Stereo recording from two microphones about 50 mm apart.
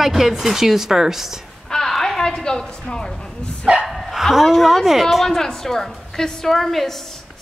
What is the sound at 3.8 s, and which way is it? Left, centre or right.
Speech, centre.